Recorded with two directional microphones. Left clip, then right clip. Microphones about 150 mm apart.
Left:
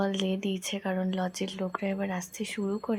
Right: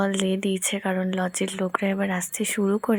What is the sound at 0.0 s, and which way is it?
Speech, 30° right (ahead or behind).